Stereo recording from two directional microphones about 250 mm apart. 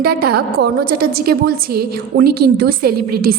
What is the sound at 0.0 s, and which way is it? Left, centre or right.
A woman's voice, right.